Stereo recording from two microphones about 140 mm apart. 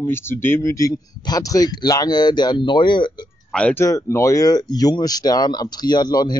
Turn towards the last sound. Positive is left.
turn(degrees=30)  # may be behind; listen again after turning